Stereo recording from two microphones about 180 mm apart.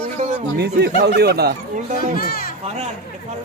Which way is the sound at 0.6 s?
65° right (ahead or behind).